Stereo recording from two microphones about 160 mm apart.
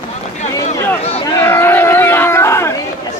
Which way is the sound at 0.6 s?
40° left (ahead or behind).